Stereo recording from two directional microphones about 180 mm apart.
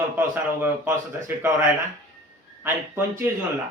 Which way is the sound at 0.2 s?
10° right (ahead or behind).